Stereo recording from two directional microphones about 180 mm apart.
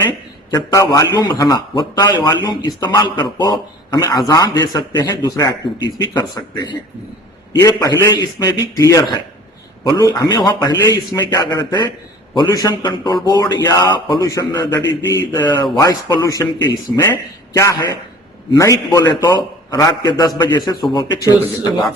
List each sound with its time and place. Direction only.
0.5 s a man's voice: 20° left (ahead or behind)